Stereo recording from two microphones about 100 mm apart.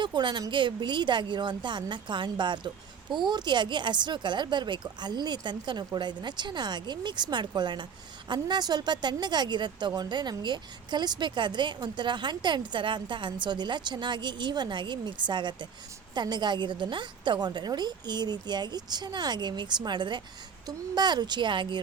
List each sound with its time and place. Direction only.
0.0 s a woman's voice: 50° right (ahead or behind)